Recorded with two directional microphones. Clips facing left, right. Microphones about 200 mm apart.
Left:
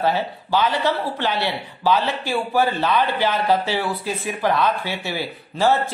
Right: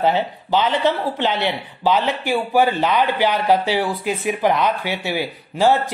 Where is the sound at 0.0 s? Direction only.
20° right (ahead or behind).